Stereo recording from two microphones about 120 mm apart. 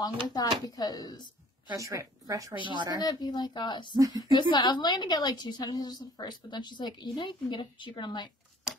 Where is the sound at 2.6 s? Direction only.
40° right (ahead or behind).